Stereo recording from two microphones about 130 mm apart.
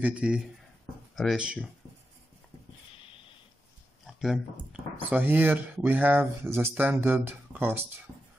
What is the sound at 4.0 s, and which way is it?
Speech, 5° right (ahead or behind).